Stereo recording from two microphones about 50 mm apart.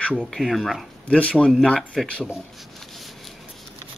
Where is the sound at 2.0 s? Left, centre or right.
Centre.